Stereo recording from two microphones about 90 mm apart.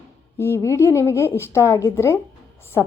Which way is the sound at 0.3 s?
25° left (ahead or behind).